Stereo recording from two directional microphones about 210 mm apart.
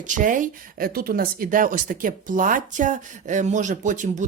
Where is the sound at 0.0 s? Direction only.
40° right (ahead or behind).